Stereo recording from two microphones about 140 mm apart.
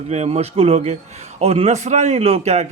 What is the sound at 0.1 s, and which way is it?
A man's voice, 50° right (ahead or behind).